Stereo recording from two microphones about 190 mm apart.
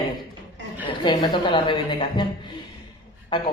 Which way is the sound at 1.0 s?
25° left (ahead or behind).